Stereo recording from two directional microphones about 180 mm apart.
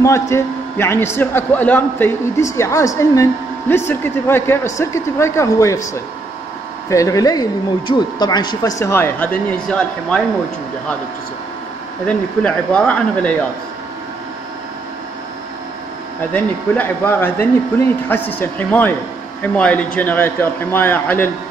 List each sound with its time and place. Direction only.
0.0 s speech: 15° left (ahead or behind)
6.9 s speech: 20° left (ahead or behind)
12.1 s speech: 5° left (ahead or behind)
16.3 s speech: 10° left (ahead or behind)